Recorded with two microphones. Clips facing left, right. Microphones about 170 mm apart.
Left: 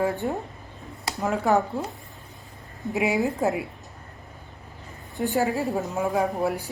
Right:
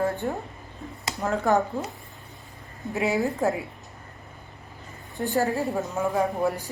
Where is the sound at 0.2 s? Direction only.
15° left (ahead or behind).